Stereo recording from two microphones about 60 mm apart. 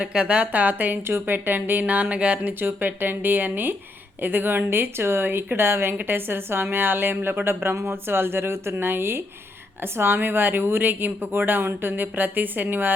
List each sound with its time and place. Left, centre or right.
0.0 s speech: centre